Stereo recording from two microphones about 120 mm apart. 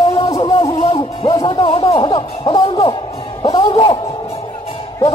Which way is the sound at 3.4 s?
35° left (ahead or behind).